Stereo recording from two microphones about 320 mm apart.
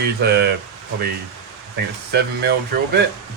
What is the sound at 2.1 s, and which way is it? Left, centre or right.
Speech, right.